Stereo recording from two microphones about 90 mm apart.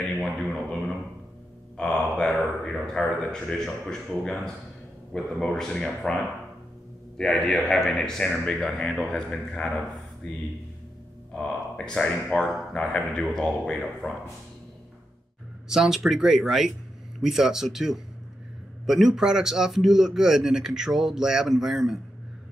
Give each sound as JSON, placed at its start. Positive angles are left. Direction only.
{"t": 0.2, "sound": "a man's voice", "side_deg": 5}
{"t": 7.2, "sound": "speech", "side_deg": 5}
{"t": 15.7, "sound": "speech", "side_deg": -5}